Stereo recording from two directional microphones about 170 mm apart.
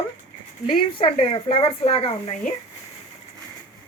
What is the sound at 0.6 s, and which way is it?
Speech, 30° left (ahead or behind).